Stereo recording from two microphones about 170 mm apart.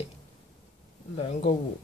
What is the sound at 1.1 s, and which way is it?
Speech, 35° left (ahead or behind).